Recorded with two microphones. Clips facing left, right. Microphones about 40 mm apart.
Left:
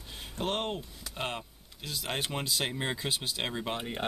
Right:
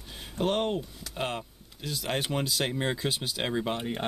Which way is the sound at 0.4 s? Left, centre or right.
Centre.